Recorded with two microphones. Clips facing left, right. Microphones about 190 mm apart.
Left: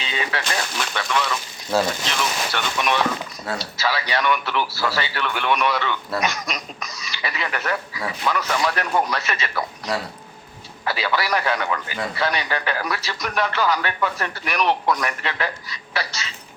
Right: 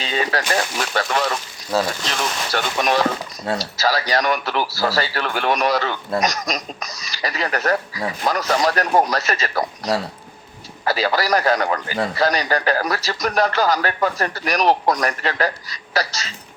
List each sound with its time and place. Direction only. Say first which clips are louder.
0.0 s a man's voice: right 5 dB; 40° right (ahead or behind)
1.7 s speech: even; centre (ahead or behind)
2.5 s a man's voice: right 7 dB; 40° right (ahead or behind)